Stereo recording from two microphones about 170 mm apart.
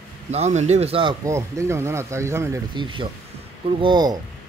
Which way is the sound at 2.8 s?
25° right (ahead or behind).